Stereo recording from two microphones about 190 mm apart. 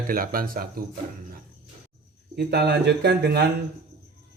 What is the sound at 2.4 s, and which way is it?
Speech, 60° right (ahead or behind).